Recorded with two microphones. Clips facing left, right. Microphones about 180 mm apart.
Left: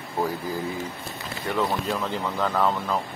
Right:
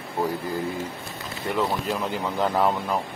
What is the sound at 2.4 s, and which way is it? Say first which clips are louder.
Speech: right 2 dB; 15° right (ahead or behind).